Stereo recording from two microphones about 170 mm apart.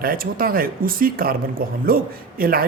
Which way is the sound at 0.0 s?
60° right (ahead or behind).